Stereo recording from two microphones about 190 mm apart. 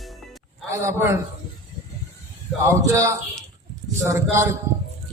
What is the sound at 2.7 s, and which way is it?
A man's voice, 15° right (ahead or behind).